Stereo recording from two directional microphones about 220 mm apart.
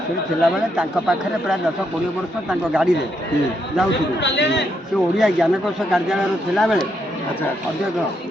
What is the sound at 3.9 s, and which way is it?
Speech, 55° left (ahead or behind).